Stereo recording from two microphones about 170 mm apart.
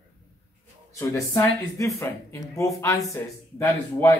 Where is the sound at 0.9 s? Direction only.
20° left (ahead or behind).